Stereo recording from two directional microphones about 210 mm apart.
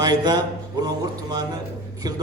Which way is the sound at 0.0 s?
20° right (ahead or behind).